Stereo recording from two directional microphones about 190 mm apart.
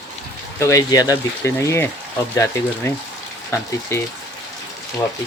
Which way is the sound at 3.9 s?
15° left (ahead or behind).